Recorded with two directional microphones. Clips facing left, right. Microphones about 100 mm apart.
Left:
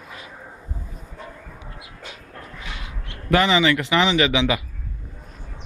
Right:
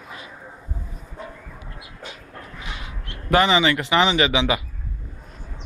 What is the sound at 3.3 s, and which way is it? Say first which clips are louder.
Speech: even; 25° right (ahead or behind).